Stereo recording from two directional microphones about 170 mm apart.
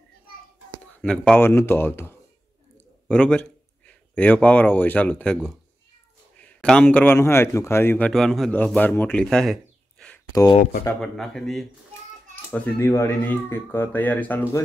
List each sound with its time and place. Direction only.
1.0 s speech: 5° left (ahead or behind)
8.1 s a man's voice: centre (ahead or behind)
10.3 s speech: 20° left (ahead or behind)
11.0 s speech: centre (ahead or behind)